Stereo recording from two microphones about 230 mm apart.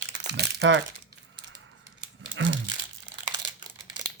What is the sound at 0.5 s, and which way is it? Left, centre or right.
Speech, right.